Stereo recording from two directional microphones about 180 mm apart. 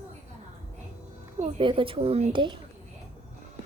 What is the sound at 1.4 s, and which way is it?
Speech, 30° right (ahead or behind).